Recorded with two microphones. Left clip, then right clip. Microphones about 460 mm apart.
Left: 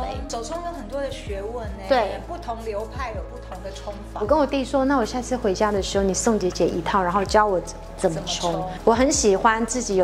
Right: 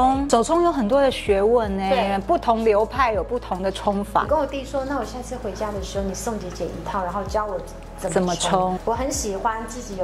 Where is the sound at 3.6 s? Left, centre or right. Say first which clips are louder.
Right 9 dB; right.